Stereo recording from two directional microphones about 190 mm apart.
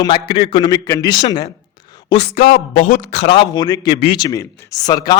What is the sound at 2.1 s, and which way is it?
A man's voice, 35° left (ahead or behind).